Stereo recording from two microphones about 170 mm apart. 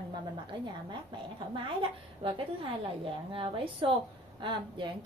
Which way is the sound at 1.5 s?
30° right (ahead or behind).